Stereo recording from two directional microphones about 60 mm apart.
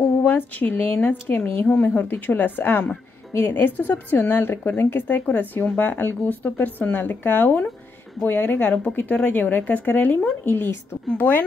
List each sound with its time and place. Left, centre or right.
0.2 s a woman's voice: left
11.1 s speech: left